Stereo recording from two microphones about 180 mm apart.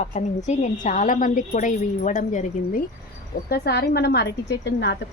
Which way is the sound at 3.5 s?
65° left (ahead or behind).